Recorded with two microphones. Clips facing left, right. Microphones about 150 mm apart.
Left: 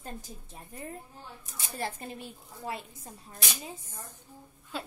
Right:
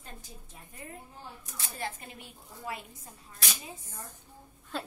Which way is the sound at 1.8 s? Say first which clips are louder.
Left 4 dB; 35° left (ahead or behind).